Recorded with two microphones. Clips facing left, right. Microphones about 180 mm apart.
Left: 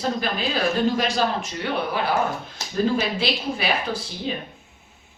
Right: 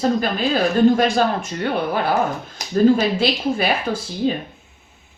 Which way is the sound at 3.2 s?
50° right (ahead or behind).